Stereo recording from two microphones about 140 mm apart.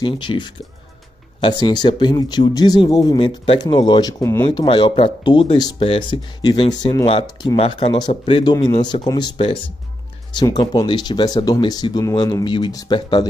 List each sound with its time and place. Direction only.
0.0 s speech: 35° left (ahead or behind)
4.2 s speech: 20° left (ahead or behind)
4.5 s speech: 35° left (ahead or behind)
7.5 s speech: 40° left (ahead or behind)
10.3 s speech: 30° left (ahead or behind)